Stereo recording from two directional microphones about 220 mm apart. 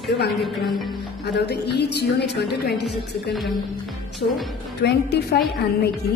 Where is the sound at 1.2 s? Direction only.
50° left (ahead or behind).